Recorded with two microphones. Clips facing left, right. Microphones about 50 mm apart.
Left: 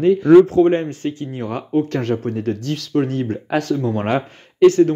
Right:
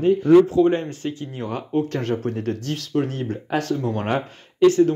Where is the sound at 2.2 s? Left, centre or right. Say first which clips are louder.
Left 3 dB; left.